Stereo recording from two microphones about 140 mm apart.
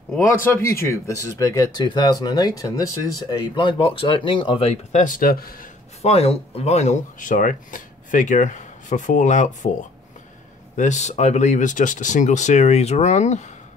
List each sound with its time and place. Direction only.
0.2 s speech: 20° left (ahead or behind); by 4.7 s 40° left (ahead or behind)
4.9 s speech: 70° left (ahead or behind); by 5.7 s 90° left
6.0 s speech: 45° left (ahead or behind)
10.8 s speech: 55° left (ahead or behind)